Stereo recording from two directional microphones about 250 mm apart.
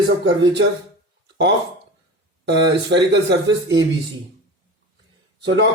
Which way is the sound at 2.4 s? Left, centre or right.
Right.